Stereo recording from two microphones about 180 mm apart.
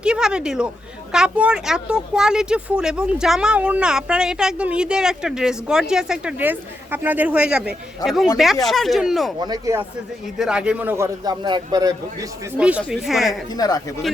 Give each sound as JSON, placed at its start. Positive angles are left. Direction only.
{"t": 0.0, "sound": "a man's voice", "side_deg": -5}
{"t": 9.4, "sound": "speech", "side_deg": -20}
{"t": 10.3, "sound": "a man's voice", "side_deg": -5}
{"t": 12.5, "sound": "speech", "side_deg": -5}
{"t": 13.5, "sound": "speech", "side_deg": 20}